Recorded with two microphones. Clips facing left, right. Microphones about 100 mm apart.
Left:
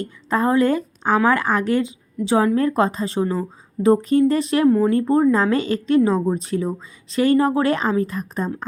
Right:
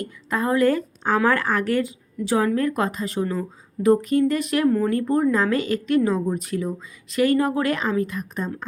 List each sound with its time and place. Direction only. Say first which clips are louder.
0.0 s a woman's voice: left 4 dB; 30° left (ahead or behind)